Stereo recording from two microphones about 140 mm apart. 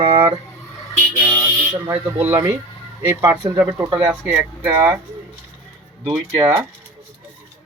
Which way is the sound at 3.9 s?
25° right (ahead or behind).